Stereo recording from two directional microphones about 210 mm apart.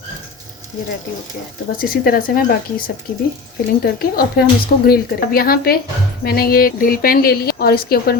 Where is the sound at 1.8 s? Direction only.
45° left (ahead or behind).